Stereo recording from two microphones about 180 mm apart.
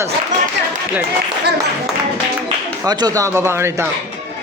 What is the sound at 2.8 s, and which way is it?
A man's voice, 20° right (ahead or behind).